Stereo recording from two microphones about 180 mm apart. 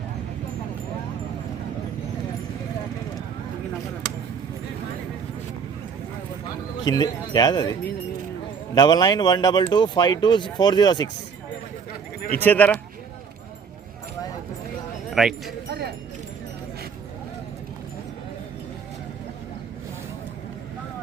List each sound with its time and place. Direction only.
6.8 s speech: 20° left (ahead or behind)
12.4 s speech: 10° left (ahead or behind)
15.1 s speech: centre (ahead or behind)